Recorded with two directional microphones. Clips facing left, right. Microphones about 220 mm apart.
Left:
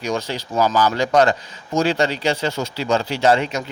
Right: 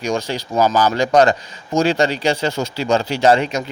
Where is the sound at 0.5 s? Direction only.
40° right (ahead or behind).